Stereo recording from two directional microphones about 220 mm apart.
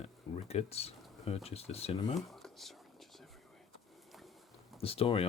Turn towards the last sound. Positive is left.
turn(degrees=25)  # may be behind; listen again after turning